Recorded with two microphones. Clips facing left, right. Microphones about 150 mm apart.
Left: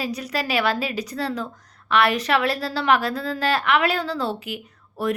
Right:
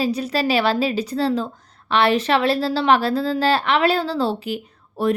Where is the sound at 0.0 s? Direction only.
30° right (ahead or behind).